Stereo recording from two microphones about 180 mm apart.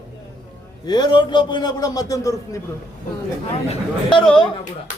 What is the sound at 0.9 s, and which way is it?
A man's voice, 25° left (ahead or behind).